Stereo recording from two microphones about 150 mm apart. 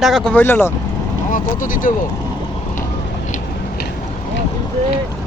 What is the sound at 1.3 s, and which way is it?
Speech, 65° left (ahead or behind).